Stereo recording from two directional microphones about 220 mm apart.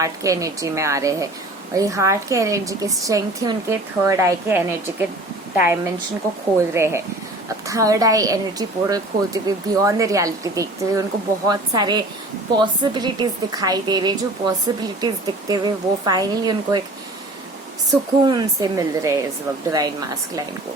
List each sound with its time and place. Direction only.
0.0 s a woman's voice: 15° right (ahead or behind)
18.3 s a woman's voice: 15° right (ahead or behind)